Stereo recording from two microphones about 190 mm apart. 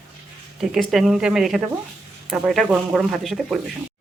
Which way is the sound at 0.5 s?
Centre (ahead or behind).